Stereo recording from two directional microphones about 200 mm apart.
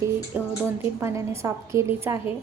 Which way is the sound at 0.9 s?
15° right (ahead or behind).